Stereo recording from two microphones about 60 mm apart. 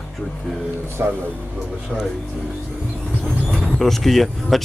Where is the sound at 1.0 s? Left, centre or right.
Right.